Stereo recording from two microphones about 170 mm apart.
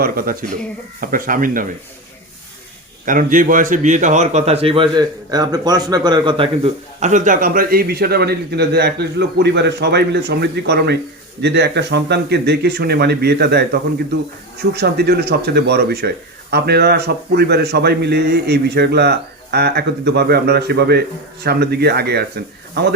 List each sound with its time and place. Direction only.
0.0 s speech: 60° right (ahead or behind)
3.1 s a man's voice: 50° right (ahead or behind); by 7.1 s 35° right (ahead or behind)
7.1 s a man's voice: 50° right (ahead or behind); by 13.7 s 70° right (ahead or behind)
14.7 s a man's voice: 70° right (ahead or behind)